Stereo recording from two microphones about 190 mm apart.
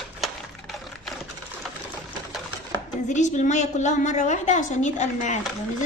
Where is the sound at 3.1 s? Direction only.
40° left (ahead or behind).